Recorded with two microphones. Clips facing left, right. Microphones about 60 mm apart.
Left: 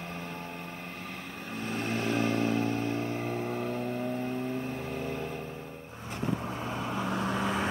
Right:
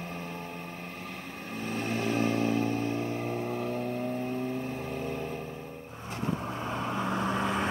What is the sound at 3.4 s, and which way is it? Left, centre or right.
Vehicle, left.